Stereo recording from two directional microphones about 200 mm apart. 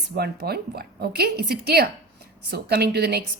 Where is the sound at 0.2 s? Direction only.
50° right (ahead or behind).